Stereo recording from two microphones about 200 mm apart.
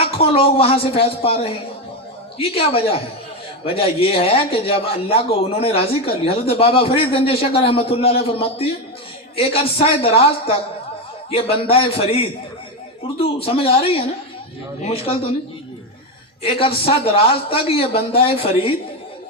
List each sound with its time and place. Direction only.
0.0 s a man's voice: 30° left (ahead or behind)
16.4 s a man's voice: 25° left (ahead or behind)